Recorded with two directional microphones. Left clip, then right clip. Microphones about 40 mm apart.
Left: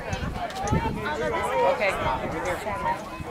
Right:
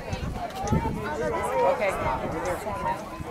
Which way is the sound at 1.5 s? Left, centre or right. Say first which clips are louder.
Left 1 dB; centre.